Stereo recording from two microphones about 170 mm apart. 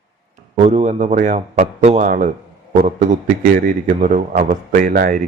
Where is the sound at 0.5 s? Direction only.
40° right (ahead or behind).